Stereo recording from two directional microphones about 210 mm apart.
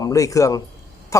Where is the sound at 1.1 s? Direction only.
15° left (ahead or behind).